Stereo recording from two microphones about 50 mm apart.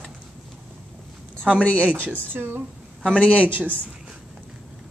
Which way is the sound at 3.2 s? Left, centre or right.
Left.